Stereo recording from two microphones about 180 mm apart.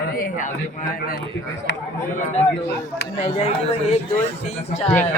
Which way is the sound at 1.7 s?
90° left.